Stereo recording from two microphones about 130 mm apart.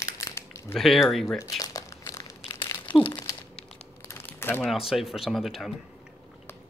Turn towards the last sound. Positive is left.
turn(degrees=0)  # may be behind; listen again after turning